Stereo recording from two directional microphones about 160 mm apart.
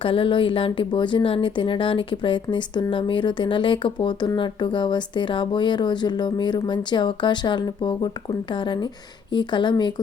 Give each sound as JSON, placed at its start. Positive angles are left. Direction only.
{"t": 0.0, "sound": "speech", "side_deg": 35}